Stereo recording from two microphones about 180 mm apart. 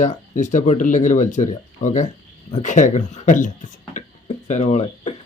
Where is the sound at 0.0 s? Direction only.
45° left (ahead or behind).